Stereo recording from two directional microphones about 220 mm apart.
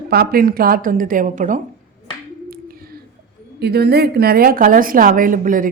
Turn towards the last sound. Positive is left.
turn(degrees=-40)  # may be behind; listen again after turning